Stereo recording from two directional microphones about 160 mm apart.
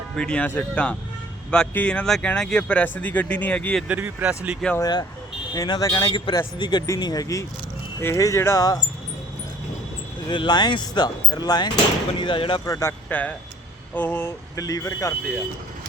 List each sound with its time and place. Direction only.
0.2 s speech: 5° left (ahead or behind)
3.8 s speech: 10° right (ahead or behind)
4.8 s speech: 25° left (ahead or behind)
10.2 s speech: 30° left (ahead or behind)
12.6 s speech: 20° left (ahead or behind)